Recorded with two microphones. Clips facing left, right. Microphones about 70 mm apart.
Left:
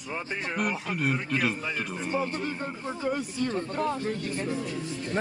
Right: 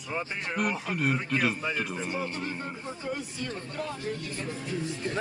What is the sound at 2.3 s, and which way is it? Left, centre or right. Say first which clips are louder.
Speech: left 2 dB; left.